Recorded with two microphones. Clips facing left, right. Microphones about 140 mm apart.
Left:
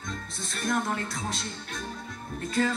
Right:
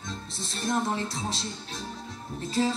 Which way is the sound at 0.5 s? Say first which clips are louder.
Right 1 dB; 30° right (ahead or behind).